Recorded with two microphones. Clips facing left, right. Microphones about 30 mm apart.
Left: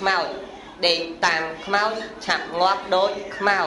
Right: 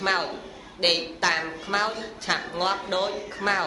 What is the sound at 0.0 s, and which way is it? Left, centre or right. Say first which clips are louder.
Speech: left 3 dB; centre.